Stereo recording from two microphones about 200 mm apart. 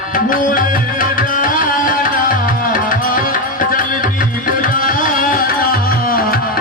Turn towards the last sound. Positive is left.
turn(degrees=45)  # may be behind; listen again after turning